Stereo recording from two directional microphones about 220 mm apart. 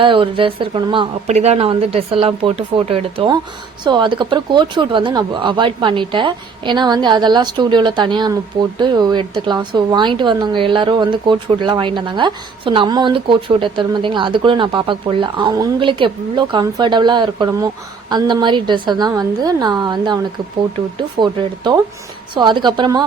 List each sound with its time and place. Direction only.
0.0 s a woman's voice: 20° right (ahead or behind)